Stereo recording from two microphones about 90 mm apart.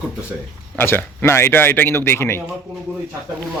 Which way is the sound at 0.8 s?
25° left (ahead or behind).